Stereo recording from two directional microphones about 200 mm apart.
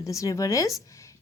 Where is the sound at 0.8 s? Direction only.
15° left (ahead or behind).